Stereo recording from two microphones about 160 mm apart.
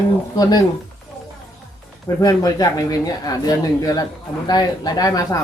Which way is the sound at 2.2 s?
25° left (ahead or behind).